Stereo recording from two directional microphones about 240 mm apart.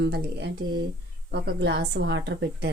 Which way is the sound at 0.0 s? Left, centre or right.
Right.